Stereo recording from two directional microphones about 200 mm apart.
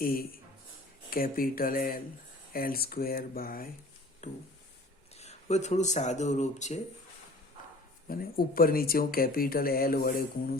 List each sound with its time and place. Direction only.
0.0 s speech: 45° left (ahead or behind)
4.2 s a sound: 35° left (ahead or behind)
5.1 s speech: 35° left (ahead or behind)
8.0 s speech: 45° left (ahead or behind)